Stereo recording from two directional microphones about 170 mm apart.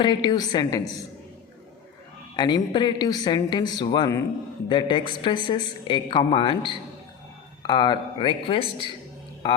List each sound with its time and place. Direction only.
0.0 s a woman's voice: 25° left (ahead or behind)
2.3 s a woman's voice: 25° left (ahead or behind)